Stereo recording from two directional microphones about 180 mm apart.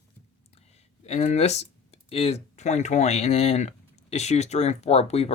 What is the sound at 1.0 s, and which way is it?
Speech, 35° left (ahead or behind).